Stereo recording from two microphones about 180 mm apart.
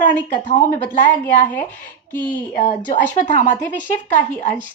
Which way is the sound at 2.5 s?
45° left (ahead or behind).